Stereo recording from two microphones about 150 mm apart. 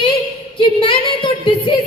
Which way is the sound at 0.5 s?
35° left (ahead or behind).